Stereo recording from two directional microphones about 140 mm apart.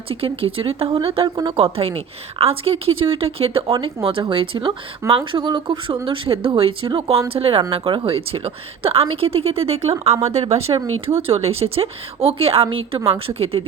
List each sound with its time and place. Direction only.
0.1 s a woman's voice: 40° right (ahead or behind)